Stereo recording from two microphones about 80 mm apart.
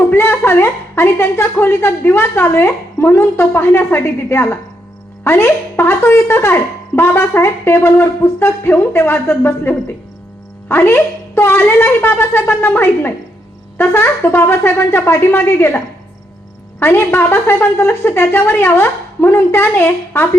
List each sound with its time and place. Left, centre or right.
0.1 s a woman's voice: left
16.8 s a woman's voice: left